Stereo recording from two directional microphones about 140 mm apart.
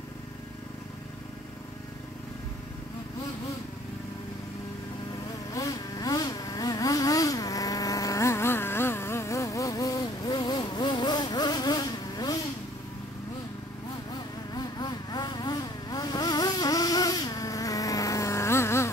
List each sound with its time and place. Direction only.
5.5 s vehicle: 25° left (ahead or behind)
14.5 s vehicle: 30° left (ahead or behind)